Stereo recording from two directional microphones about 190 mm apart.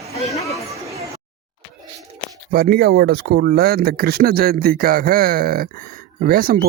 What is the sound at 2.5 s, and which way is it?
Speech, 55° right (ahead or behind).